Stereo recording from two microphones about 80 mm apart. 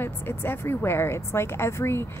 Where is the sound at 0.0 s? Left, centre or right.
Left.